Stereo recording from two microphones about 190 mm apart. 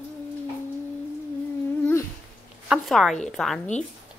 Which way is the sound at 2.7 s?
Centre (ahead or behind).